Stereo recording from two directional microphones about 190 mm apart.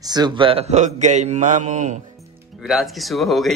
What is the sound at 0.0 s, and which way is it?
A man's voice, 20° right (ahead or behind).